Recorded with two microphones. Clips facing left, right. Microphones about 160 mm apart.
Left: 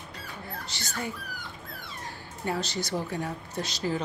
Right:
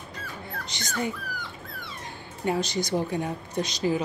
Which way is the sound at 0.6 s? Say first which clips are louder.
Right 6 dB; 20° right (ahead or behind).